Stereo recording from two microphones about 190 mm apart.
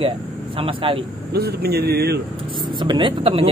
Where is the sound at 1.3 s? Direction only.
55° right (ahead or behind).